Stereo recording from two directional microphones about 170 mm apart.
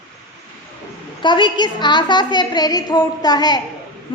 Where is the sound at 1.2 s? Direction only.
25° left (ahead or behind).